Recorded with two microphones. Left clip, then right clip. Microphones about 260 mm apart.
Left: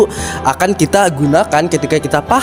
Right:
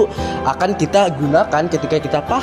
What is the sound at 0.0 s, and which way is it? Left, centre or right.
A man's voice, left.